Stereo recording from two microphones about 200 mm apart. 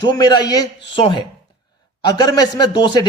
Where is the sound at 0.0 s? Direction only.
20° left (ahead or behind).